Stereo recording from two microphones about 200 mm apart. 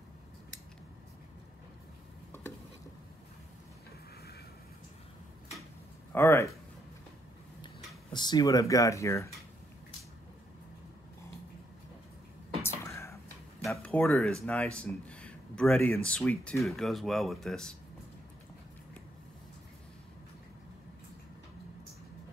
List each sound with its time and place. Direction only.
6.1 s speech: 15° left (ahead or behind)
7.6 s speech: 20° left (ahead or behind)
12.6 s whispering: 15° left (ahead or behind)
13.7 s speech: 5° left (ahead or behind)